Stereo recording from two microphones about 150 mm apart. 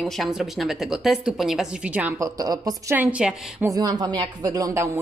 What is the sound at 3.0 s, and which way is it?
Speech, 10° right (ahead or behind).